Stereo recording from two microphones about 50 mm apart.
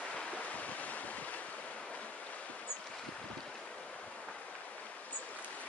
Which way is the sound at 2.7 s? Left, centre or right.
Left.